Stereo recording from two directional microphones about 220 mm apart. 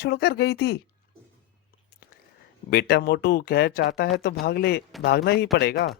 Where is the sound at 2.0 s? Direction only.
45° left (ahead or behind).